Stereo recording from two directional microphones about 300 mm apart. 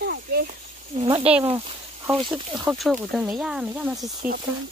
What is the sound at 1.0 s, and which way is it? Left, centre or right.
Speech, centre.